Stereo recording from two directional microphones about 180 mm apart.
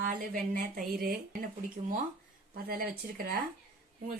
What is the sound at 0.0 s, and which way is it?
Speech, 50° right (ahead or behind).